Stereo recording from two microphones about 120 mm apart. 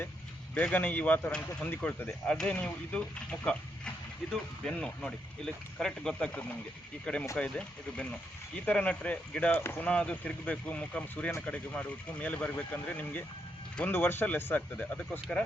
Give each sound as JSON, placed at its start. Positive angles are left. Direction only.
{"t": 0.5, "sound": "speech", "side_deg": 10}
{"t": 4.3, "sound": "speech", "side_deg": 5}